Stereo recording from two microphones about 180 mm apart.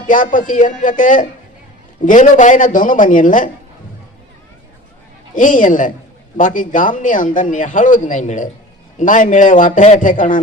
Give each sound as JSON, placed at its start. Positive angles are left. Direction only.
{"t": 0.1, "sound": "a man's voice", "side_deg": 45}
{"t": 5.3, "sound": "a man's voice", "side_deg": 45}